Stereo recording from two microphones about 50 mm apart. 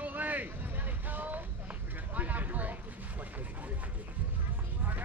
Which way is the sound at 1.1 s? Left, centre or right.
Right.